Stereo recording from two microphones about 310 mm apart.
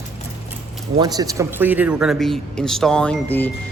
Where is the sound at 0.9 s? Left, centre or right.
Centre.